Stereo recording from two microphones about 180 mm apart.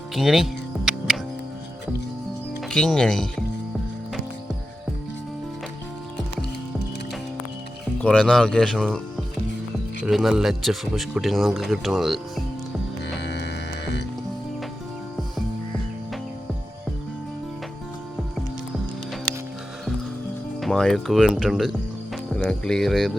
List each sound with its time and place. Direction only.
0.1 s music: centre (ahead or behind)
2.6 s speech: 5° left (ahead or behind)
8.0 s speech: 5° left (ahead or behind)
13.1 s music: 70° left (ahead or behind)
20.6 s speech: centre (ahead or behind)